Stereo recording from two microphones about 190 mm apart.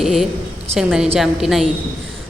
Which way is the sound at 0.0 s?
Centre (ahead or behind).